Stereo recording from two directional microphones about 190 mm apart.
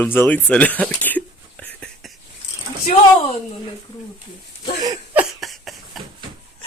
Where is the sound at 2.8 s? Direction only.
40° left (ahead or behind).